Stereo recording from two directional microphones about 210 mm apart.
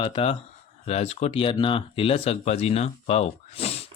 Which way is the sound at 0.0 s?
25° left (ahead or behind).